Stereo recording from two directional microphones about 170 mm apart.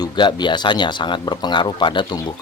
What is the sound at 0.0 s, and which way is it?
Speech, 25° left (ahead or behind).